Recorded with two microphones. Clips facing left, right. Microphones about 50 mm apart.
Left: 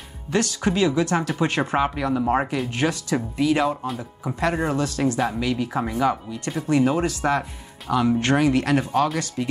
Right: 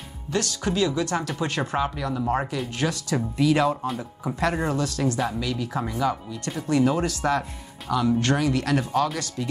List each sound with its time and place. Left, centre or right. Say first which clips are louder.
0.3 s speech: left 4 dB; centre
3.8 s speech: even; centre